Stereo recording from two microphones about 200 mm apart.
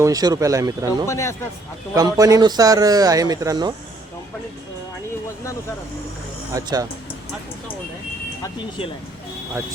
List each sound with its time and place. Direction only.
0.0 s speech: 20° right (ahead or behind)
1.0 s a man's voice: 15° left (ahead or behind)
2.0 s speech: 15° right (ahead or behind)
6.5 s speech: 20° right (ahead or behind)